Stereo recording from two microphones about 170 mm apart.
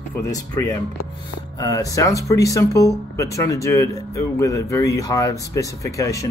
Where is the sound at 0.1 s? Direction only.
20° left (ahead or behind).